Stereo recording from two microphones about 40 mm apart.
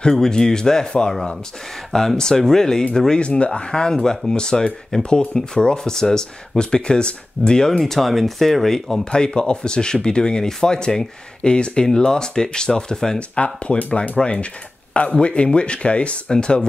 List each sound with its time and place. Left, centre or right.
0.0 s speech: centre
3.2 s speech: left
7.8 s speech: centre
9.1 s speech: left
13.4 s speech: left
14.1 s speech: left